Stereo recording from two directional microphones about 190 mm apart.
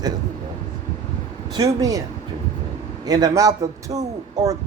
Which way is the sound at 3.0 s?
20° right (ahead or behind).